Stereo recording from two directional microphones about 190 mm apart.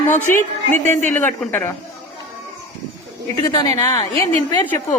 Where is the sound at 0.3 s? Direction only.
10° left (ahead or behind).